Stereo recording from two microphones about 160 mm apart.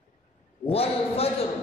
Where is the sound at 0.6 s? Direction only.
40° left (ahead or behind).